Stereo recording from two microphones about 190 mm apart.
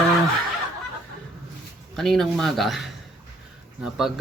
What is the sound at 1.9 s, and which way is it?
Speech, centre (ahead or behind).